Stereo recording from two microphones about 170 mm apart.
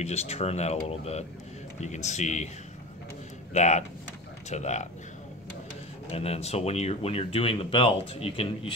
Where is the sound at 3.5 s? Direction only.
40° left (ahead or behind).